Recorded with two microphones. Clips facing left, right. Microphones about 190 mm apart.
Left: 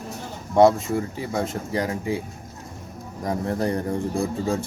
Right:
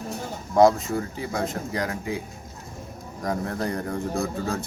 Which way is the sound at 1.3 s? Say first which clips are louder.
Left 3 dB; 25° left (ahead or behind).